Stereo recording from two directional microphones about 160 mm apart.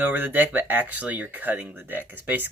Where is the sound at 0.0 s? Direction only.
10° right (ahead or behind).